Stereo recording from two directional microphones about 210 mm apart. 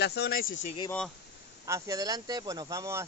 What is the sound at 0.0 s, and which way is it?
Speech, 50° left (ahead or behind).